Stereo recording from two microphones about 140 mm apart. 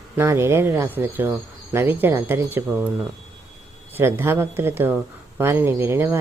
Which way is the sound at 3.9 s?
15° right (ahead or behind).